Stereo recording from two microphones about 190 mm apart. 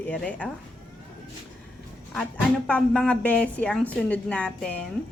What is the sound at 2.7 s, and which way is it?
A woman's voice, 5° left (ahead or behind).